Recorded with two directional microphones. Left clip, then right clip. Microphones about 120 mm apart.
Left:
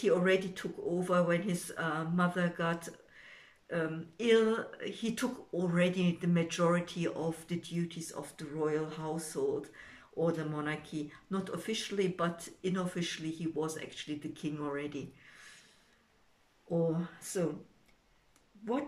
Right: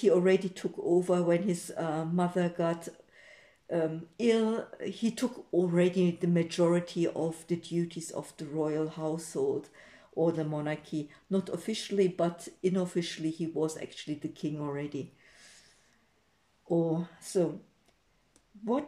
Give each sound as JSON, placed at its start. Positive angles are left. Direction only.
{"t": 0.0, "sound": "speech", "side_deg": -40}
{"t": 16.6, "sound": "speech", "side_deg": -45}